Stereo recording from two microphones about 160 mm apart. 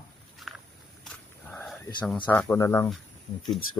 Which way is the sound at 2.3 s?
15° left (ahead or behind).